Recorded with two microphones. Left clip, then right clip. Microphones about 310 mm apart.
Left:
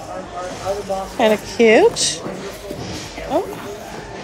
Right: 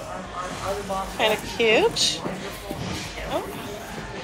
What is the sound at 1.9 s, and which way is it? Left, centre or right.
Speech, left.